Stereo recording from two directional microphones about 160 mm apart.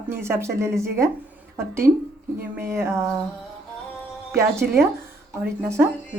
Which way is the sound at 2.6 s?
15° right (ahead or behind).